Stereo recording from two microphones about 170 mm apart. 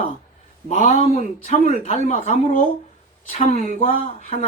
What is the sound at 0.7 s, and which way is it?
A man's voice, 40° left (ahead or behind).